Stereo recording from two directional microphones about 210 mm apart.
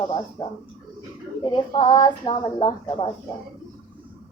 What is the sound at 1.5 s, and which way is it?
Speech, 20° left (ahead or behind).